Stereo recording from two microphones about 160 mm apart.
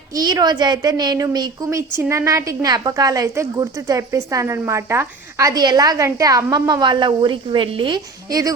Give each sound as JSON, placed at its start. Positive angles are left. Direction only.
{"t": 0.2, "sound": "speech", "side_deg": -25}